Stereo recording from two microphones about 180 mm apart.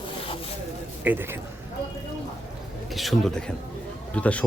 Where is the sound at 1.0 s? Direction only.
10° right (ahead or behind).